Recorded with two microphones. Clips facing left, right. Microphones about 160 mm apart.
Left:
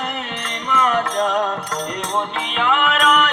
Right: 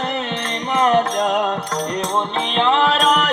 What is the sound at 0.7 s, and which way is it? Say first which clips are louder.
Music: right 3 dB; 25° right (ahead or behind).